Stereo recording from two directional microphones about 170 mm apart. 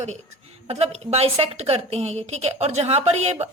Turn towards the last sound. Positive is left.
turn(degrees=-35)  # may be behind; listen again after turning